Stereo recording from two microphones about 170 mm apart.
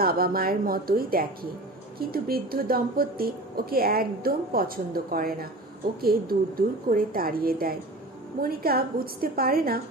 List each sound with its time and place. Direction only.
0.0 s a woman's voice: 60° right (ahead or behind)